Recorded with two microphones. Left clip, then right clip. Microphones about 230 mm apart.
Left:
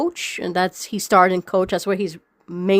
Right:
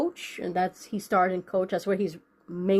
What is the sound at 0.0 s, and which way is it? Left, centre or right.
Speech, left.